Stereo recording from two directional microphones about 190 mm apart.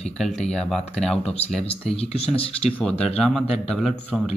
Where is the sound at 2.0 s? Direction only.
30° left (ahead or behind).